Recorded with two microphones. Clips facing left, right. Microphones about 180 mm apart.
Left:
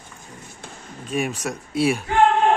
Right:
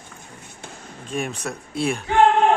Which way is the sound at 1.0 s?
10° left (ahead or behind).